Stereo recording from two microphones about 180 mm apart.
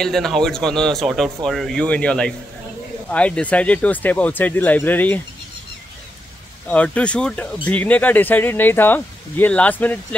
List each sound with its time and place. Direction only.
0.0 s speech: centre (ahead or behind)
6.7 s speech: 5° left (ahead or behind)